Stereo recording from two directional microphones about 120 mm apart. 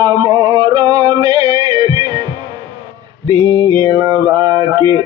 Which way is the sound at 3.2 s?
35° right (ahead or behind).